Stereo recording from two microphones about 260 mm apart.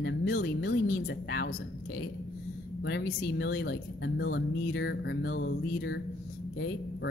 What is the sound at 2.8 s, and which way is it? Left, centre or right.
A woman's voice, left.